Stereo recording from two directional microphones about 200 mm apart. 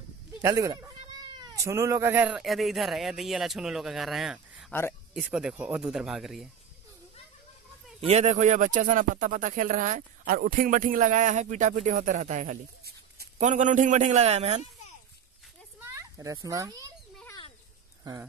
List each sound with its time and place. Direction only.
0.4 s speech: 15° right (ahead or behind)
8.0 s speech: 35° right (ahead or behind)
15.8 s a child's voice: 15° right (ahead or behind)